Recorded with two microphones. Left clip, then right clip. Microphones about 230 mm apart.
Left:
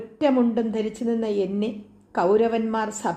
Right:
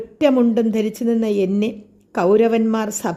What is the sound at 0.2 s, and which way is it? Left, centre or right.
A woman's voice, right.